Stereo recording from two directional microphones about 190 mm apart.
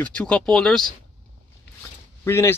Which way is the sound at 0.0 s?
5° left (ahead or behind).